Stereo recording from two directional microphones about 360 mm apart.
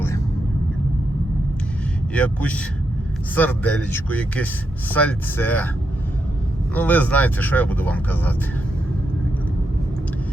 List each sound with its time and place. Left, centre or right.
2.1 s speech: centre
6.7 s speech: centre